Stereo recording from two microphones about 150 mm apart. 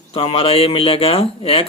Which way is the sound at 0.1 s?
40° left (ahead or behind).